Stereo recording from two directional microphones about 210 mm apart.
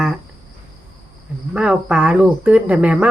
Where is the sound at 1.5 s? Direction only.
5° right (ahead or behind).